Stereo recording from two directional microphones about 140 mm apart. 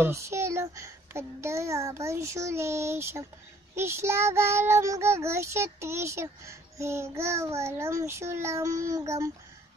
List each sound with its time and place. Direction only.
0.0 s child singing: 20° right (ahead or behind)